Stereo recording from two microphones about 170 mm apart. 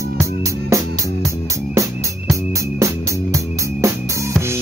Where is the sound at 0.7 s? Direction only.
20° right (ahead or behind).